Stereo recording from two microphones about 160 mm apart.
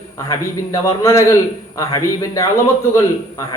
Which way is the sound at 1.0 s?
20° left (ahead or behind).